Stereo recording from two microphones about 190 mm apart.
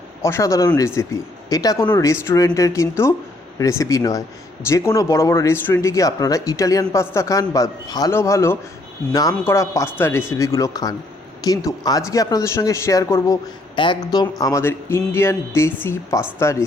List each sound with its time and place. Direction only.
0.2 s speech: 15° left (ahead or behind)